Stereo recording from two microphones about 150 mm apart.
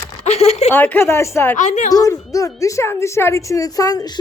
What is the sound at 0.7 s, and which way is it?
Speech, 15° left (ahead or behind).